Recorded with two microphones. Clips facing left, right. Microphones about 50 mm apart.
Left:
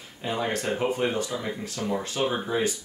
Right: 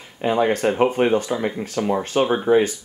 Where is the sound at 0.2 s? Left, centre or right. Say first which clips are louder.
Right 9 dB; right.